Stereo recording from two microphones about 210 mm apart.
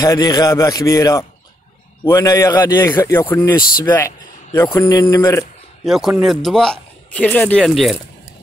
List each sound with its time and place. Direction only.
0.0 s a man's voice: 15° left (ahead or behind)
5.9 s speech: centre (ahead or behind)